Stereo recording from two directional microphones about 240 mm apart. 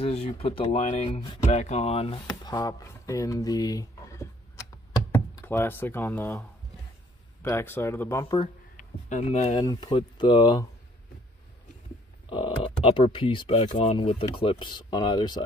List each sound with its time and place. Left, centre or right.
0.0 s speech: left; by 6.4 s centre
7.4 s speech: centre
8.7 s speech: left
12.3 s speech: centre